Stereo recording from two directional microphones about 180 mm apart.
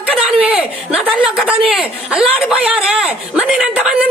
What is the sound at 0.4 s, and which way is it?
Speech, 5° right (ahead or behind).